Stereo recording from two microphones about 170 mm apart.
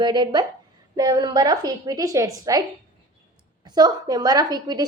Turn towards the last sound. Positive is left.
turn(degrees=-25)  # may be behind; listen again after turning